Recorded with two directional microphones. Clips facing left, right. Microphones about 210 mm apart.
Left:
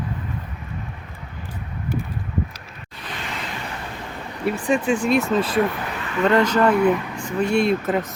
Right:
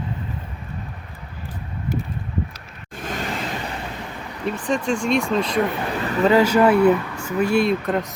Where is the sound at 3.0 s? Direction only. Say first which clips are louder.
Right 6 dB; 45° right (ahead or behind).